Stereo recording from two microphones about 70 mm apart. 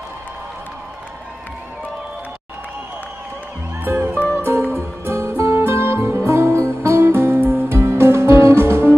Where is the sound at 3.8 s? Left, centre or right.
Right.